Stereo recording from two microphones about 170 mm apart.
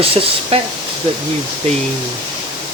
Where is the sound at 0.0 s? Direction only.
35° right (ahead or behind).